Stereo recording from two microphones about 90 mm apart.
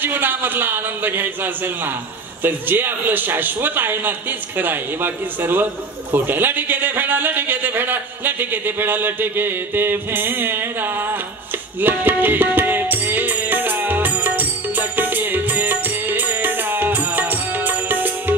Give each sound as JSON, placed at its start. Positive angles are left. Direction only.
{"t": 0.0, "sound": "a man's voice", "side_deg": -20}
{"t": 11.8, "sound": "music", "side_deg": -20}